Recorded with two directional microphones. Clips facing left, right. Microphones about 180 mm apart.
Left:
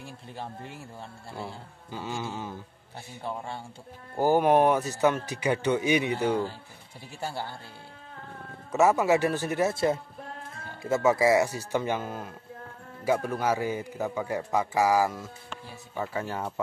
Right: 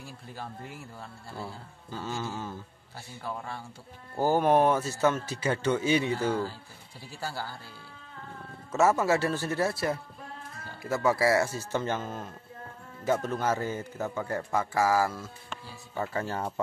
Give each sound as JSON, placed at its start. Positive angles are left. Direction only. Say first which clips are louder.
{"t": 0.0, "sound": "speech", "louder": "left 2 dB", "side_deg": 25}
{"t": 1.3, "sound": "speech", "louder": "left 1 dB", "side_deg": 15}
{"t": 3.2, "sound": "speech", "louder": "left 2 dB", "side_deg": 30}
{"t": 4.2, "sound": "speech", "louder": "left 2 dB", "side_deg": 15}
{"t": 8.7, "sound": "speech", "louder": "left 2 dB", "side_deg": 15}